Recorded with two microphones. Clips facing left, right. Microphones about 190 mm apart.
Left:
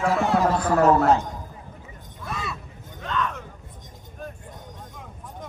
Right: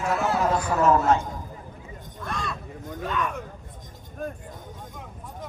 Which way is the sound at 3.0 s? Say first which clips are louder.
Left 1 dB; 10° right (ahead or behind).